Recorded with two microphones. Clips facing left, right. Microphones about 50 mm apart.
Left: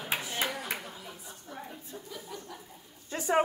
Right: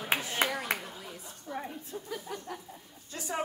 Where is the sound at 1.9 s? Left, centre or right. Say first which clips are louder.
Right 4 dB; right.